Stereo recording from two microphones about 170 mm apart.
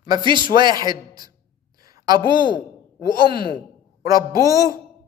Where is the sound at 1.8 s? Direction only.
20° right (ahead or behind).